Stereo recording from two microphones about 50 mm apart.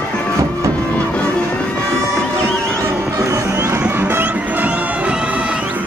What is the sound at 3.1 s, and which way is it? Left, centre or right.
Music, right.